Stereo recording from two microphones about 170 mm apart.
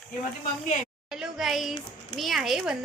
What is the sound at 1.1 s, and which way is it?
A woman's voice, centre (ahead or behind).